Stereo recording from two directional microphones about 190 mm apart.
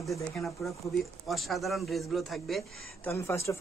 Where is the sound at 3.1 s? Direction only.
15° left (ahead or behind).